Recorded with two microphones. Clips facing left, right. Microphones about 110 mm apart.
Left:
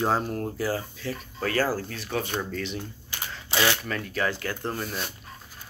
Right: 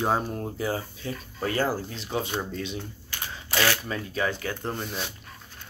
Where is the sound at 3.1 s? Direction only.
20° left (ahead or behind).